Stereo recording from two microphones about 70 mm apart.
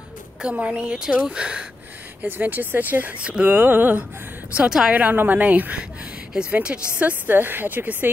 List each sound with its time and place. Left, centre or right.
0.4 s speech: centre
2.2 s speech: right
4.6 s speech: centre
4.9 s speech: right